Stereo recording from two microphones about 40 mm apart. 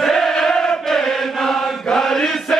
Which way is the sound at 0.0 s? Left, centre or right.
Centre.